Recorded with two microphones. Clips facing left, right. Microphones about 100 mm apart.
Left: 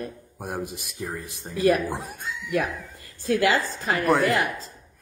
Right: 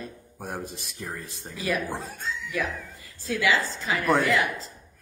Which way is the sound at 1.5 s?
55° left (ahead or behind).